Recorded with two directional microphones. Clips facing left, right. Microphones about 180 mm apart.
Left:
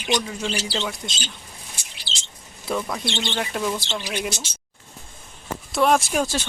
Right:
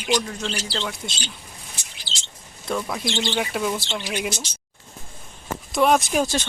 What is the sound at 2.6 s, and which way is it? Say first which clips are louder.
Speech: even; centre (ahead or behind).